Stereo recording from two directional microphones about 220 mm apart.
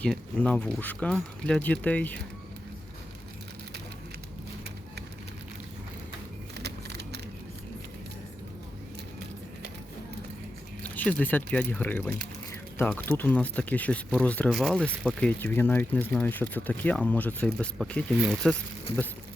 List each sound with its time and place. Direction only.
0.0 s speech: 5° left (ahead or behind)
6.6 s a sound: 50° right (ahead or behind)
10.8 s speech: 5° left (ahead or behind)